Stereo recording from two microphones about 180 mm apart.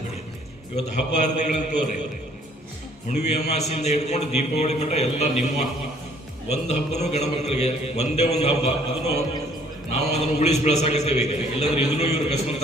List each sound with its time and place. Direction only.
0.9 s a man's voice: 40° left (ahead or behind)
3.1 s a man's voice: 40° left (ahead or behind)
9.9 s a man's voice: 35° left (ahead or behind)